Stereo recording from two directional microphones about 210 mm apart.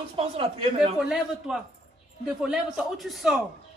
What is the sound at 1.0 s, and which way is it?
A man's voice, centre (ahead or behind).